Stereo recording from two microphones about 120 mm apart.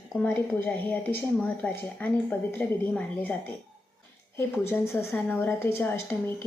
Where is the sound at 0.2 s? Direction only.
15° left (ahead or behind).